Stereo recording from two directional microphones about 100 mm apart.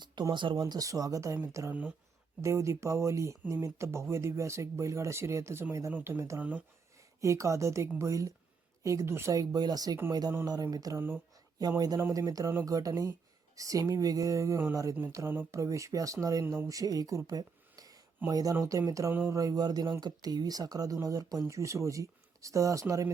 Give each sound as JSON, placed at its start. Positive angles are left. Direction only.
{"t": 0.0, "sound": "speech", "side_deg": -45}
{"t": 0.6, "sound": "speech", "side_deg": -35}
{"t": 2.4, "sound": "speech", "side_deg": -30}